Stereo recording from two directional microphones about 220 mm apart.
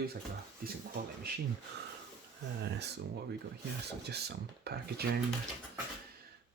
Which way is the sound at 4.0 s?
50° right (ahead or behind).